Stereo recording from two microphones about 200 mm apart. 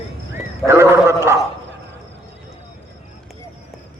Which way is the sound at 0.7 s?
15° right (ahead or behind).